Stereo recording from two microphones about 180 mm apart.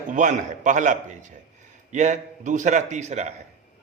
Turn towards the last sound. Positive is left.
turn(degrees=-40)  # may be behind; listen again after turning